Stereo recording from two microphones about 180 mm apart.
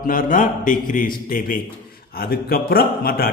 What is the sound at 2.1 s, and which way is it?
A man's voice, 55° left (ahead or behind).